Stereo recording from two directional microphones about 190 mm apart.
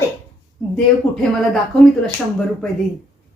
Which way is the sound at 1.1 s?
5° left (ahead or behind).